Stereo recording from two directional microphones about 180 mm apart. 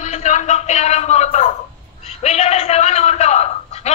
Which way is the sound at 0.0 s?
40° left (ahead or behind).